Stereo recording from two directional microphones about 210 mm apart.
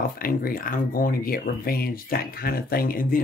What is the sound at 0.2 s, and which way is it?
Speech, 45° left (ahead or behind).